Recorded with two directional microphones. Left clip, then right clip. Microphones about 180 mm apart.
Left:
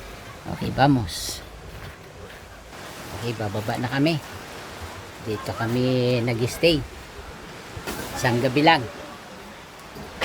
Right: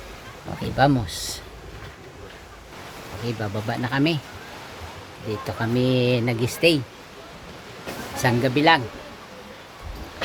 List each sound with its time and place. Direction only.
0.6 s speech: 5° right (ahead or behind)
3.2 s speech: 5° right (ahead or behind)
5.5 s speech: 15° right (ahead or behind)
8.1 s speech: 15° right (ahead or behind)